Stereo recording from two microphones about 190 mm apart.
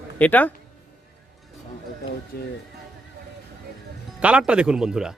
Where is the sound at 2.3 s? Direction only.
55° left (ahead or behind).